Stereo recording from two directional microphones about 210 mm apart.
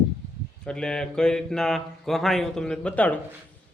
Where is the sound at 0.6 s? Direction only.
5° left (ahead or behind).